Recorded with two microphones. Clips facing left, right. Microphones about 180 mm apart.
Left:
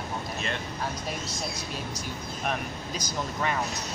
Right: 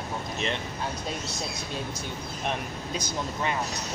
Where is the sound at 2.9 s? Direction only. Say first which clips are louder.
Right 1 dB; 25° right (ahead or behind).